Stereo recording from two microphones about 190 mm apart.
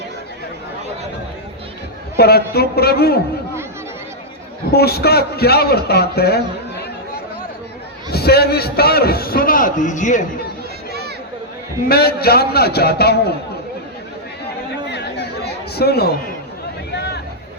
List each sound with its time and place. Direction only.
2.1 s a man's voice: 55° left (ahead or behind)
4.7 s a man's voice: 55° left (ahead or behind)
8.1 s a man's voice: 55° left (ahead or behind); by 10.2 s 40° left (ahead or behind)
11.9 s a man's voice: 55° left (ahead or behind)
14.4 s chatter: 60° left (ahead or behind)
16.9 s a sound: 60° left (ahead or behind)